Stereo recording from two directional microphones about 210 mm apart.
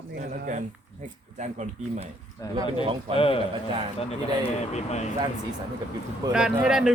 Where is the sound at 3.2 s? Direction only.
25° left (ahead or behind).